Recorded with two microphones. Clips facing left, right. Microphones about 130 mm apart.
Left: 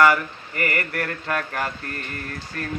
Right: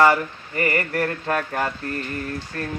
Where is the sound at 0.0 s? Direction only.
30° right (ahead or behind).